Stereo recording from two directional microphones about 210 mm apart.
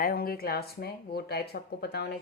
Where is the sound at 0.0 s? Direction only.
45° left (ahead or behind).